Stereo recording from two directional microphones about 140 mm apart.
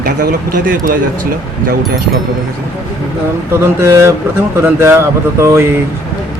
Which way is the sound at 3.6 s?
20° right (ahead or behind).